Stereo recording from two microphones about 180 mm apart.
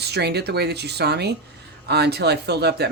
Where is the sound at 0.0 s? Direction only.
65° right (ahead or behind).